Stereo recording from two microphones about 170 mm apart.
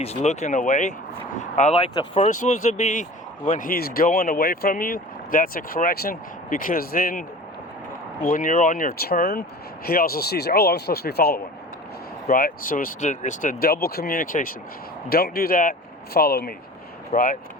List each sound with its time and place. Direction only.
0.0 s speech: 40° left (ahead or behind); by 11.4 s 70° left (ahead or behind)
12.3 s speech: 55° left (ahead or behind)
17.1 s speech: 50° left (ahead or behind)